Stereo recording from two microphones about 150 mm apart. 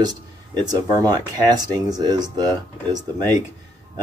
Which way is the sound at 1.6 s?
25° right (ahead or behind).